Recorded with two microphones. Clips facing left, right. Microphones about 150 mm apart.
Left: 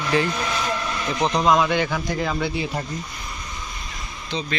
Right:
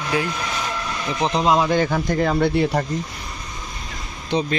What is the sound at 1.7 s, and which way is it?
Speech, 40° right (ahead or behind).